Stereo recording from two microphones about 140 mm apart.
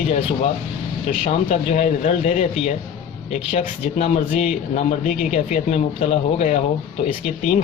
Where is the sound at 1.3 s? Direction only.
50° left (ahead or behind).